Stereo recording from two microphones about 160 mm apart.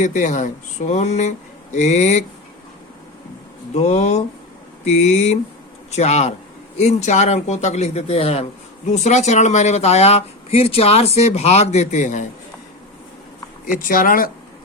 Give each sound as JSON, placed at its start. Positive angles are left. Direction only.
{"t": 0.0, "sound": "speech", "side_deg": 50}
{"t": 3.8, "sound": "speech", "side_deg": 45}
{"t": 13.7, "sound": "speech", "side_deg": 60}